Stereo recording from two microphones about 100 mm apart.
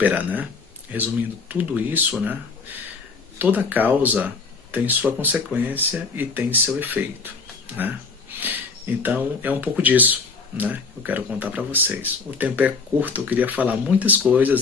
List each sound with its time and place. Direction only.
0.0 s speech: 15° right (ahead or behind)
3.3 s speech: 15° right (ahead or behind)